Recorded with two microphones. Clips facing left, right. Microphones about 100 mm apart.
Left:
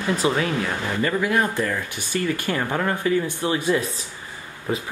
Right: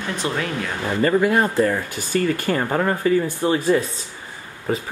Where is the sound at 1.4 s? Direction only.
30° right (ahead or behind).